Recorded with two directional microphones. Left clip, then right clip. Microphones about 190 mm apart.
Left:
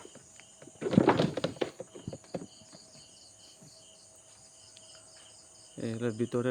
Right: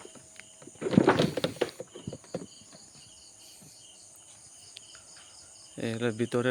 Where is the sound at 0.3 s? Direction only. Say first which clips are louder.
Right 2 dB; 50° right (ahead or behind).